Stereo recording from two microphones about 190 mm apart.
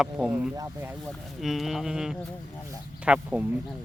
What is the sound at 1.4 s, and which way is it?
Speech, centre (ahead or behind).